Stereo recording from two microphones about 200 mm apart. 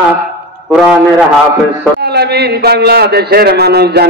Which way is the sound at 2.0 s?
55° right (ahead or behind).